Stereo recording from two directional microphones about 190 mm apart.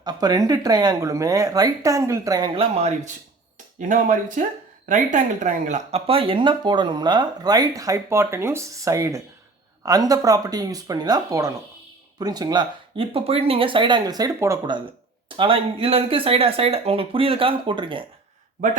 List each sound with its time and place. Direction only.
0.0 s speech: 20° right (ahead or behind)
15.4 s speech: 30° right (ahead or behind)